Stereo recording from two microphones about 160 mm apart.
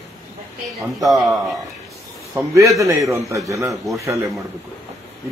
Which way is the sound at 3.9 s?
Centre (ahead or behind).